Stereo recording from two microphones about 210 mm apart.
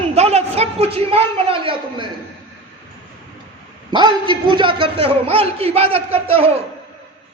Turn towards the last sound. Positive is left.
turn(degrees=-25)  # may be behind; listen again after turning